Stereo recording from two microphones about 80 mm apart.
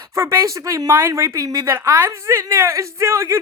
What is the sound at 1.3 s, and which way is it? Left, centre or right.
A woman's voice, right.